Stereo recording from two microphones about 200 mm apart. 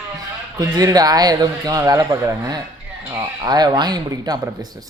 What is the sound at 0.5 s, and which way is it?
A man's voice, 15° right (ahead or behind).